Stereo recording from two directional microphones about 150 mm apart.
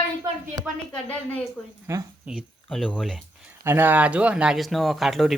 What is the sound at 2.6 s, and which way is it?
Speech, 5° left (ahead or behind).